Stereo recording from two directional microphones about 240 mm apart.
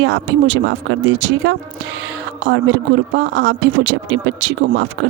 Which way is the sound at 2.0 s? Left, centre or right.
Right.